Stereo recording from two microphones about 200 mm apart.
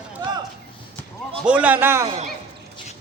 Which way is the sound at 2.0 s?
35° right (ahead or behind).